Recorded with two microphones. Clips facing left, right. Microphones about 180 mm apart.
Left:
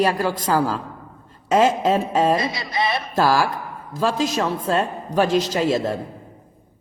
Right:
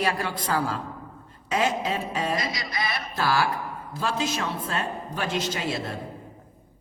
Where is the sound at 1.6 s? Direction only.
40° left (ahead or behind).